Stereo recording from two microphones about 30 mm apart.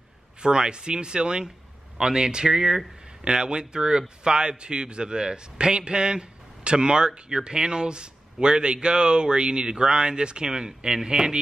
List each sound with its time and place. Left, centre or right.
0.4 s a man's voice: right
2.4 s speech: centre
3.3 s a man's voice: right